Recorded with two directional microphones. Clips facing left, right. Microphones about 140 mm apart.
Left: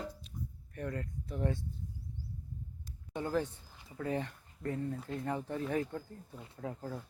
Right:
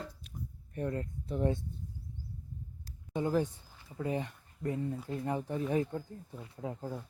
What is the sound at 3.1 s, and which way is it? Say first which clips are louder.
Speech: right 3 dB; 15° right (ahead or behind).